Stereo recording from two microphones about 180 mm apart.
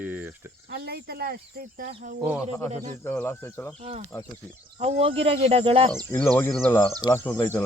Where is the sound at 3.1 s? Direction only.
15° left (ahead or behind).